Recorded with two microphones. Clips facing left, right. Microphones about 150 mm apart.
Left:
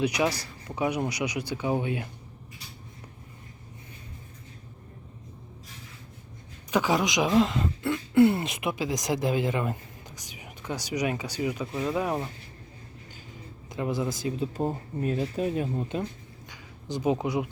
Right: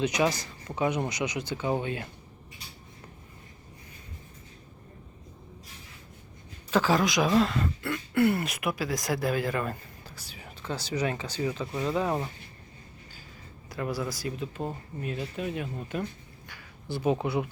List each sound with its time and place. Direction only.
0.0 s speech: 10° left (ahead or behind)
6.7 s speech: 15° left (ahead or behind)
13.7 s speech: 20° left (ahead or behind)
16.5 s a sound: 15° left (ahead or behind)